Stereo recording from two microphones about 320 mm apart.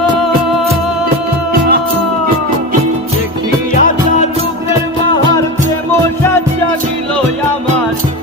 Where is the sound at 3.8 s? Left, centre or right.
Left.